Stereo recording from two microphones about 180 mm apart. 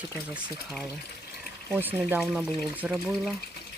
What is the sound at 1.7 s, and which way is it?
Speech, 10° right (ahead or behind).